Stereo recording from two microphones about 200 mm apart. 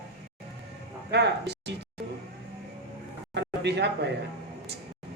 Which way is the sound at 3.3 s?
55° right (ahead or behind).